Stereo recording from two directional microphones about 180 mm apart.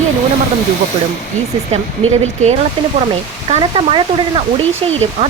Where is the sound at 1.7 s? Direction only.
40° right (ahead or behind).